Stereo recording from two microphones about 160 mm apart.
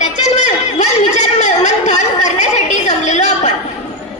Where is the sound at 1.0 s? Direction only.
45° left (ahead or behind).